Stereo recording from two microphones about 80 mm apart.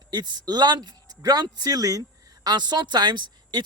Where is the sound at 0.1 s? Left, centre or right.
Right.